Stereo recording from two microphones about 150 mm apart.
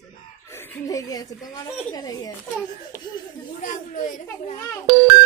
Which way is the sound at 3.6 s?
55° left (ahead or behind).